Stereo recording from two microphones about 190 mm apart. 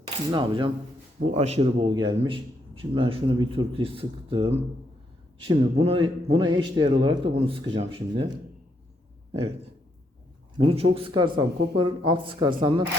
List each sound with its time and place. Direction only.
0.0 s a man's voice: 25° right (ahead or behind)
10.6 s a man's voice: 30° right (ahead or behind)